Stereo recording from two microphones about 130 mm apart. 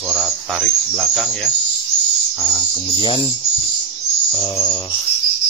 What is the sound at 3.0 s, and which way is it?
Speech, 40° left (ahead or behind).